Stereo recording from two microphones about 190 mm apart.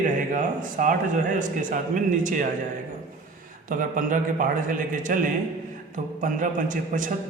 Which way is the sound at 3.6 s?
45° right (ahead or behind).